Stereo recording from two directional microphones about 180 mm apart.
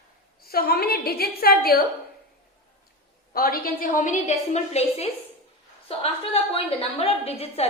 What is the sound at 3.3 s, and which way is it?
A woman's voice, 55° left (ahead or behind).